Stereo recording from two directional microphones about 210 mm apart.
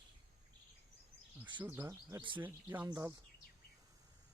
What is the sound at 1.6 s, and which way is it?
Speech, 10° right (ahead or behind).